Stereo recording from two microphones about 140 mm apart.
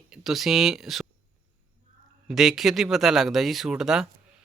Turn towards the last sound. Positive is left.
turn(degrees=-5)  # may be behind; listen again after turning